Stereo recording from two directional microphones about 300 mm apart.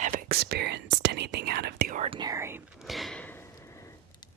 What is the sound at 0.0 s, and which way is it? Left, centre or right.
Whispering, right.